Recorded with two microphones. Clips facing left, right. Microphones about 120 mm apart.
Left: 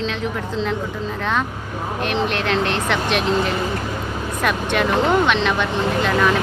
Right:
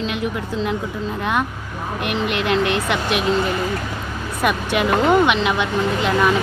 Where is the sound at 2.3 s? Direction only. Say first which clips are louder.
Right 1 dB; 10° right (ahead or behind).